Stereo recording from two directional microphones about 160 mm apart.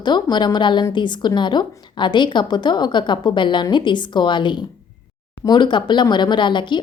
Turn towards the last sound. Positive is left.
turn(degrees=30)  # may be behind; listen again after turning